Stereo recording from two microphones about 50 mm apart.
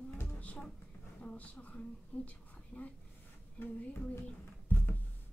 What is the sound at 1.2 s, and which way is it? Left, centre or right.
Speech, left.